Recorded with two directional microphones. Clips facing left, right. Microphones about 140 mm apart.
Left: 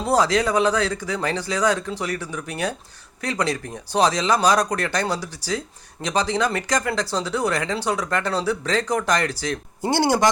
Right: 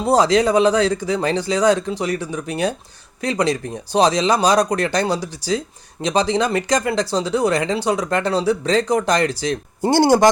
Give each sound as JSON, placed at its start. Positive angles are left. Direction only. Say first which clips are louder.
{"t": 0.0, "sound": "speech", "louder": "right 4 dB", "side_deg": -20}
{"t": 9.8, "sound": "speech", "louder": "right 6 dB", "side_deg": -40}